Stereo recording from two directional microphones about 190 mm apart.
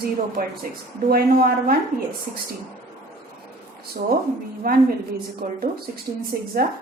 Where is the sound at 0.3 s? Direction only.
50° right (ahead or behind).